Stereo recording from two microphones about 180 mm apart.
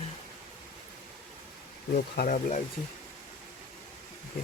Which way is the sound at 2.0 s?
55° left (ahead or behind).